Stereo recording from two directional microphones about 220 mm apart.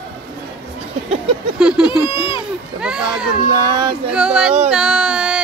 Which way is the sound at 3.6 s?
20° right (ahead or behind).